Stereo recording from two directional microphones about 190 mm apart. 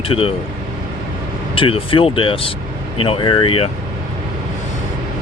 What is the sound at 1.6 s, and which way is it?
Speech, 30° left (ahead or behind).